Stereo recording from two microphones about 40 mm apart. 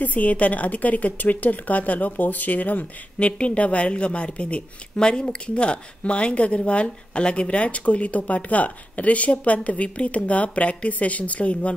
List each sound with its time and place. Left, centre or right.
0.0 s speech: left